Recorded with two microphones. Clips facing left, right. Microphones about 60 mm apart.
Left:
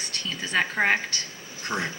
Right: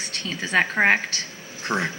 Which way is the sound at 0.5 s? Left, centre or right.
Right.